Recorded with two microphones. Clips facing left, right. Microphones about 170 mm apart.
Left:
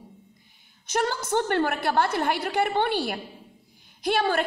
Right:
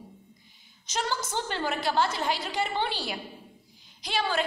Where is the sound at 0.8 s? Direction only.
55° left (ahead or behind).